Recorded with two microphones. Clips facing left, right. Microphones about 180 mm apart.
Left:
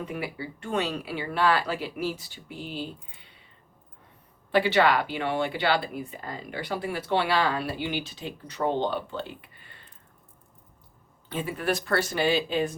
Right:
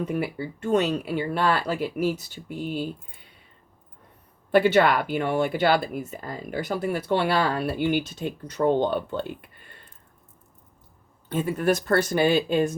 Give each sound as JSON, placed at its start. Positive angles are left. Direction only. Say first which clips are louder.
{"t": 0.0, "sound": "speech", "louder": "right 6 dB", "side_deg": -45}
{"t": 4.5, "sound": "speech", "louder": "right 3 dB", "side_deg": -45}
{"t": 11.3, "sound": "speech", "louder": "right 5 dB", "side_deg": -45}